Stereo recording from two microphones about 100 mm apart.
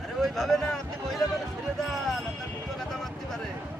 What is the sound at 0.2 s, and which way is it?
Speech, centre (ahead or behind).